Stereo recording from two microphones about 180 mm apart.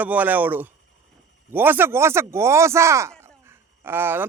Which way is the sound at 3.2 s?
15° right (ahead or behind).